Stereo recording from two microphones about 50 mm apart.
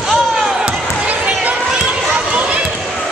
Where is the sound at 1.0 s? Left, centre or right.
Right.